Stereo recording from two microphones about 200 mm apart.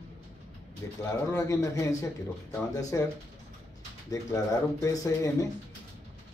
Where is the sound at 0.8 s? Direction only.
15° left (ahead or behind).